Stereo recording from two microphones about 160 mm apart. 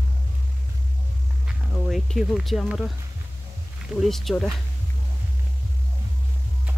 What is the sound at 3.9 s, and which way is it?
Speech, centre (ahead or behind).